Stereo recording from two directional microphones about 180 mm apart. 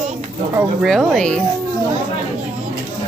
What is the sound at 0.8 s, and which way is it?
Speech, centre (ahead or behind).